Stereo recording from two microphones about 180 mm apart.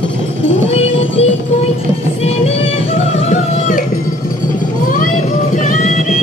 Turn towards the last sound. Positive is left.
turn(degrees=45)  # may be behind; listen again after turning